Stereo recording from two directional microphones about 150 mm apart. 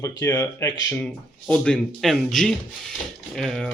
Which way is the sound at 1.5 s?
5° left (ahead or behind).